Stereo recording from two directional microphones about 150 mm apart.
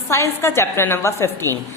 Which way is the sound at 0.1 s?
20° left (ahead or behind).